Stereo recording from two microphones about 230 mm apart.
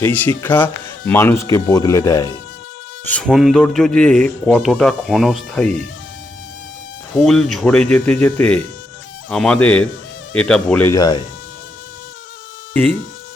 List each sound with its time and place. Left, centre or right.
0.0 s speech: centre
7.2 s speech: centre